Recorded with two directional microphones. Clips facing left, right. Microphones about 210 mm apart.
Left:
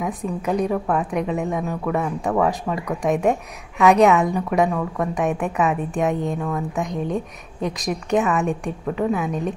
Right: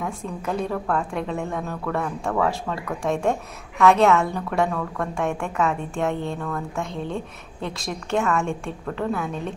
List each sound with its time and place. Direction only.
0.0 s a woman's voice: 15° left (ahead or behind)